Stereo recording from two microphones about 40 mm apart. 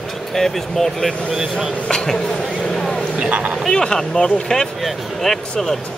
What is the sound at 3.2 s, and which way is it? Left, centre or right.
Speech, right.